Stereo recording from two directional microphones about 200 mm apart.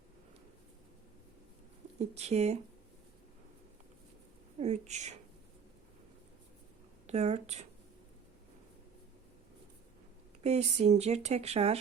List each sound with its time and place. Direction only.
2.0 s speech: 35° right (ahead or behind)
4.6 s speech: 35° right (ahead or behind)
7.1 s speech: 30° right (ahead or behind)
10.4 s speech: 35° right (ahead or behind)